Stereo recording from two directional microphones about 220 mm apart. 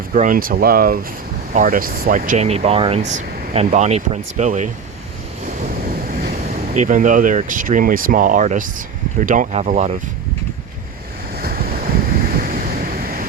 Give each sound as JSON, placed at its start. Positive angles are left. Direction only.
{"t": 0.1, "sound": "speech", "side_deg": -40}
{"t": 5.5, "sound": "waves", "side_deg": -40}
{"t": 6.7, "sound": "speech", "side_deg": -35}
{"t": 11.3, "sound": "waves", "side_deg": -45}